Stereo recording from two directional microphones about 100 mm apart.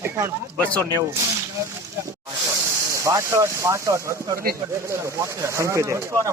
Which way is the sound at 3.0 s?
30° right (ahead or behind).